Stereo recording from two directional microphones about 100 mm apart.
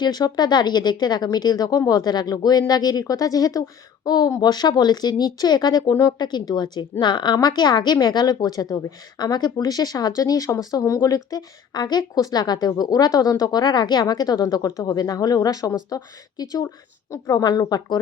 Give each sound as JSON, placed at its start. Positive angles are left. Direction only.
{"t": 0.0, "sound": "a woman's voice", "side_deg": 45}